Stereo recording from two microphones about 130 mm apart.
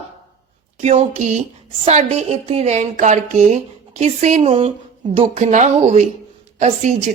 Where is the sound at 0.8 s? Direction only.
60° right (ahead or behind).